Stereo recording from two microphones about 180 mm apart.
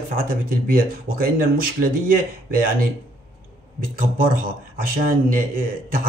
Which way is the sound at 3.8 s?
50° right (ahead or behind).